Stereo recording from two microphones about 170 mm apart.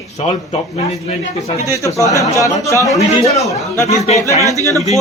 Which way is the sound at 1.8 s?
20° left (ahead or behind).